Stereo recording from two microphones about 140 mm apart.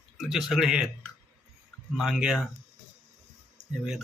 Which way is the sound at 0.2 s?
Centre (ahead or behind).